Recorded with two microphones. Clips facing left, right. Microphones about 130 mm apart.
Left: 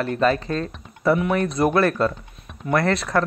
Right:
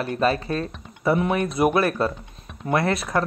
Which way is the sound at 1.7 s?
15° right (ahead or behind).